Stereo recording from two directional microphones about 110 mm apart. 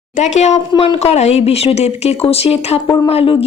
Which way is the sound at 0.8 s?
65° left (ahead or behind).